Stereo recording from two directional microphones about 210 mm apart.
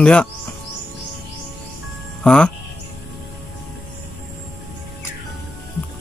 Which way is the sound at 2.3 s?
5° left (ahead or behind).